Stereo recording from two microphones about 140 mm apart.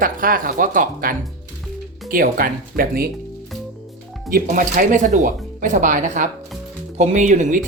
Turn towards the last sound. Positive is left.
turn(degrees=-60)  # may be behind; listen again after turning